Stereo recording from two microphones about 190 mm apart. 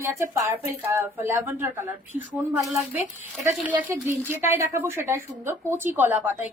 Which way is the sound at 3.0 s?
5° right (ahead or behind).